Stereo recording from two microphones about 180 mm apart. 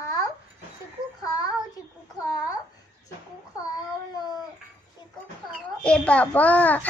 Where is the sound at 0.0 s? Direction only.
20° left (ahead or behind).